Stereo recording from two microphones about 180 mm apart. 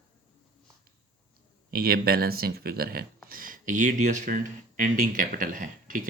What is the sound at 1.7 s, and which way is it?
Speech, 55° right (ahead or behind).